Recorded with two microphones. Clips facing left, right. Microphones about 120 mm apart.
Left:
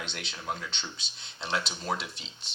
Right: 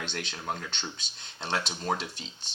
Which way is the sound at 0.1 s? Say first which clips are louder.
Right 2 dB; 45° right (ahead or behind).